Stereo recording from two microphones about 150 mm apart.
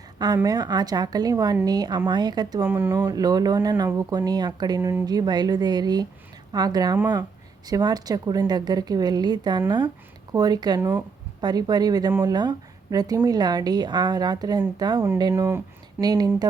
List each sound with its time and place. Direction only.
0.4 s a woman's voice: 25° right (ahead or behind)
2.6 s a woman's voice: 15° right (ahead or behind)
4.8 s speech: 15° right (ahead or behind)
5.0 s a woman's voice: 25° right (ahead or behind)
10.8 s speech: 15° right (ahead or behind)
11.3 s a woman's voice: 30° right (ahead or behind)